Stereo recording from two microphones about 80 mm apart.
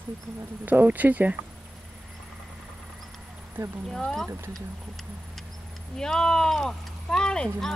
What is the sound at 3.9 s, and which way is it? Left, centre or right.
Speech, centre.